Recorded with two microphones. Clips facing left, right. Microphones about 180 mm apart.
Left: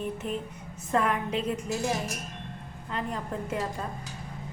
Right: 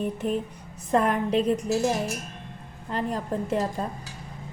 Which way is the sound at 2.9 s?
35° right (ahead or behind).